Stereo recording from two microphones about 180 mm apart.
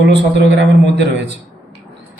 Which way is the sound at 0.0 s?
75° right (ahead or behind).